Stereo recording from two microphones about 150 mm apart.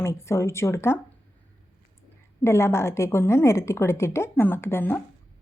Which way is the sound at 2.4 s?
15° left (ahead or behind).